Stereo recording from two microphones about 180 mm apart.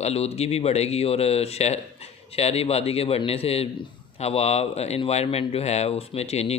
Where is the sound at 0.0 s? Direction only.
35° left (ahead or behind).